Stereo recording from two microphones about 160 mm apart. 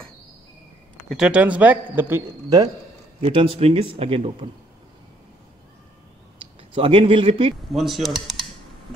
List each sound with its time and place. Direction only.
1.0 s a man's voice: 5° right (ahead or behind); by 2.7 s 20° right (ahead or behind)
3.2 s speech: 35° right (ahead or behind)
6.4 s speech: 35° right (ahead or behind)
7.7 s speech: centre (ahead or behind)